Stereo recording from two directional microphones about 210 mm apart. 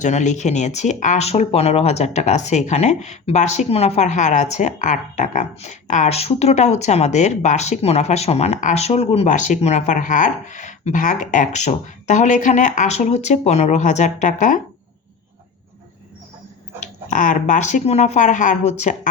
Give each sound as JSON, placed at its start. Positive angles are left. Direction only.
{"t": 0.0, "sound": "speech", "side_deg": 35}
{"t": 16.8, "sound": "speech", "side_deg": 35}